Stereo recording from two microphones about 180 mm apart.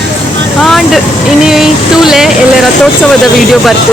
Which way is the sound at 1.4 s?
Centre (ahead or behind).